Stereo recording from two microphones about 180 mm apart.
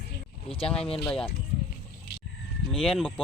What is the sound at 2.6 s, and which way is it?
Speech, centre (ahead or behind).